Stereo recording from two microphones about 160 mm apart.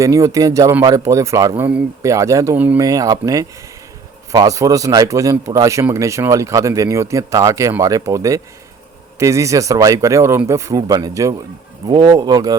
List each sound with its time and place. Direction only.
0.0 s a man's voice: 20° right (ahead or behind)